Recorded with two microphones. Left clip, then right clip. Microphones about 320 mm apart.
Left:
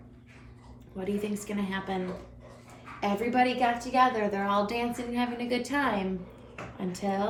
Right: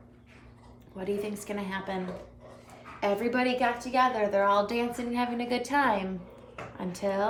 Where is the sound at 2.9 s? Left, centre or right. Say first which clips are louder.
Left 1 dB; centre.